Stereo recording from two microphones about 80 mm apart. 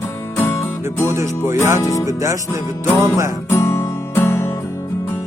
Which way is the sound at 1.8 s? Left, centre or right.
Left.